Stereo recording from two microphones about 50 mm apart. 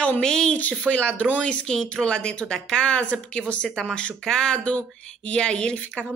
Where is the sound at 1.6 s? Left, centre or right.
Centre.